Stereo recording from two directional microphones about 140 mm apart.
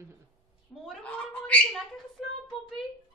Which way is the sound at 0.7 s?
10° left (ahead or behind).